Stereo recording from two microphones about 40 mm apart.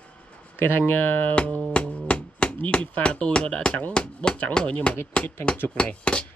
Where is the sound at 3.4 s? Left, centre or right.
Centre.